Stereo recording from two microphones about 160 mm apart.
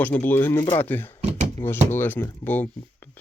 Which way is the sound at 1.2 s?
45° right (ahead or behind).